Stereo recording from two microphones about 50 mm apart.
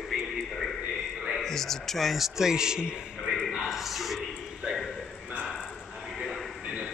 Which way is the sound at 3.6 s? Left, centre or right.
Centre.